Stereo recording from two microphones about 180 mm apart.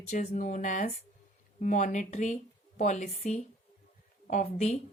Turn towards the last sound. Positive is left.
turn(degrees=40)  # may be behind; listen again after turning